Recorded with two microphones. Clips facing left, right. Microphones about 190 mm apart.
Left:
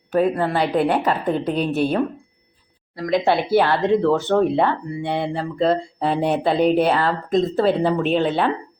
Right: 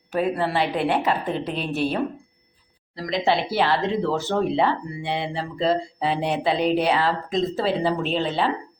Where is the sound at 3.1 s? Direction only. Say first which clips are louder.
Left 5 dB; 55° left (ahead or behind).